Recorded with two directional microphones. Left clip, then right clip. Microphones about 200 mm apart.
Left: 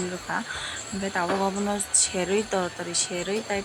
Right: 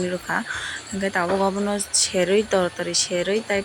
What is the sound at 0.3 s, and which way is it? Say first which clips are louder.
Speech: right 4 dB; 15° right (ahead or behind).